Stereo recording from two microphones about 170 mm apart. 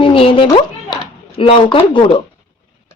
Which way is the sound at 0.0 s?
30° left (ahead or behind).